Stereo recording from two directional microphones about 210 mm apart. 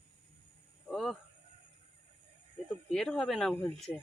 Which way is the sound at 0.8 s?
Centre (ahead or behind).